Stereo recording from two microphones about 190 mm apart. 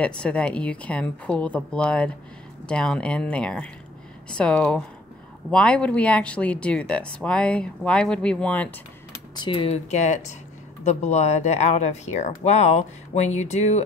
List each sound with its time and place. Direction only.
0.0 s a woman's voice: 5° left (ahead or behind)
9.3 s speech: 25° left (ahead or behind)